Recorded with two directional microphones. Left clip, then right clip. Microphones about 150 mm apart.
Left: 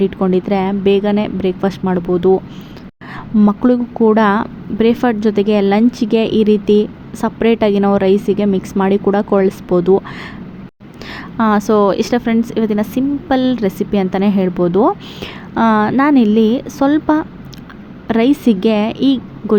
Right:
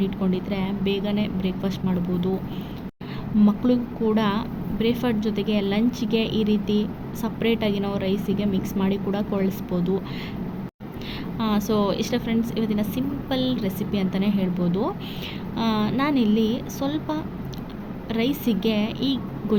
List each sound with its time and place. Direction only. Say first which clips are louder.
0.0 s a woman's voice: left 12 dB; 45° left (ahead or behind)
3.6 s a woman's voice: left 10 dB; 50° left (ahead or behind)
11.3 s a woman's voice: left 12 dB; 50° left (ahead or behind)